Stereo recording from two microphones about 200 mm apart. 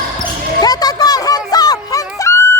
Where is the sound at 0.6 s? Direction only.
20° left (ahead or behind).